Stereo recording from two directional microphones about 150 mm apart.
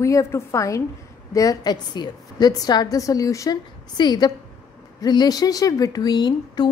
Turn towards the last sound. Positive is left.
turn(degrees=30)  # may be behind; listen again after turning